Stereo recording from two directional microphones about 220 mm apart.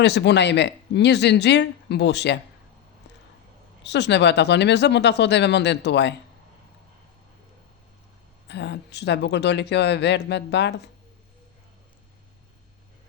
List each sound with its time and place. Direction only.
0.0 s speech: 50° left (ahead or behind)
3.8 s speech: 50° left (ahead or behind)
8.4 s speech: 50° left (ahead or behind)